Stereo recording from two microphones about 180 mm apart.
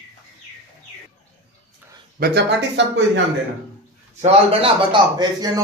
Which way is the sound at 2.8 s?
75° right (ahead or behind).